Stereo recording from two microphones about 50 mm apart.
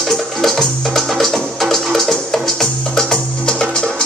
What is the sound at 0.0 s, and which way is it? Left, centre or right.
Music, centre.